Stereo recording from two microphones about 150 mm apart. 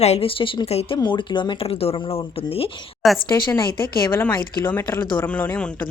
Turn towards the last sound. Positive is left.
turn(degrees=10)  # may be behind; listen again after turning